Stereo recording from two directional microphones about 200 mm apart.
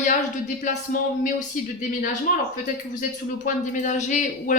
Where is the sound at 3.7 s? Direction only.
40° left (ahead or behind).